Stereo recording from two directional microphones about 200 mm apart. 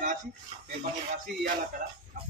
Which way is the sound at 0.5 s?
25° right (ahead or behind).